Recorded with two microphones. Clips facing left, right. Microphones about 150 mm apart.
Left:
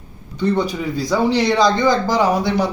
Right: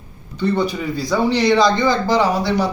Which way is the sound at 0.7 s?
Centre (ahead or behind).